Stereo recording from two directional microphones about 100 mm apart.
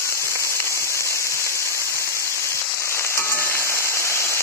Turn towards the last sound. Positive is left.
turn(degrees=25)  # may be behind; listen again after turning